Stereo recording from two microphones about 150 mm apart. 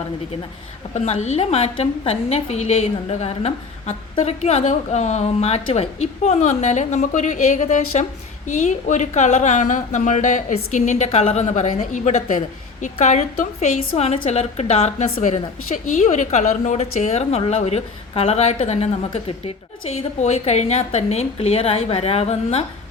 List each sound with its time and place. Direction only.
0.9 s a woman's voice: 45° left (ahead or behind)
15.1 s a woman's voice: 55° left (ahead or behind)